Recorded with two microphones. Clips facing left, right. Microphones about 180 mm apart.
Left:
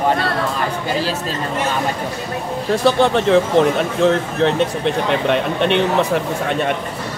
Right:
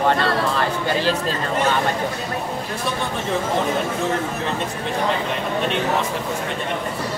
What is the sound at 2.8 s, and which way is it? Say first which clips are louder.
Speech: left 13 dB; 90° left.